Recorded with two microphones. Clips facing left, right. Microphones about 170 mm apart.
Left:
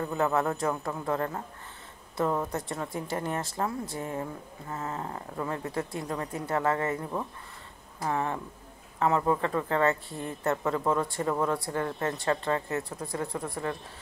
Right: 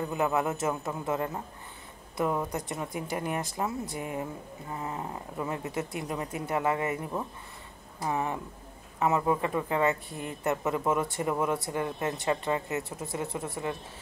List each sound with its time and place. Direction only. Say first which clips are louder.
0.0 s speech: left 1 dB; 15° right (ahead or behind)
2.5 s speech: left 1 dB; 20° right (ahead or behind)